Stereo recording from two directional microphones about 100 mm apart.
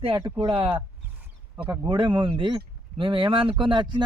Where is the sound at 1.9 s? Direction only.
55° right (ahead or behind).